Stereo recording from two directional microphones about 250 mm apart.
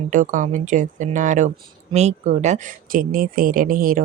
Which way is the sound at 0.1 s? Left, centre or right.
Right.